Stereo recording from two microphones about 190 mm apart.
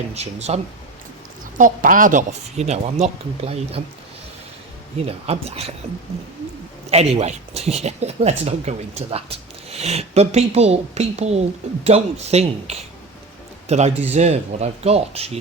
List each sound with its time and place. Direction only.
0.1 s speech: 35° right (ahead or behind)
1.5 s speech: 45° right (ahead or behind)
5.0 s speech: 30° right (ahead or behind)
6.9 s speech: 35° right (ahead or behind)